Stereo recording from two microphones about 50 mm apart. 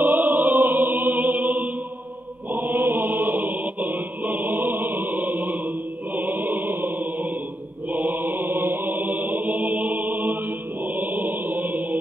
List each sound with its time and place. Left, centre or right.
0.0 s music: right
2.5 s chant: right
6.1 s music: right
7.9 s mantra: right
9.5 s chant: right
9.8 s choir: right
11.0 s chant: right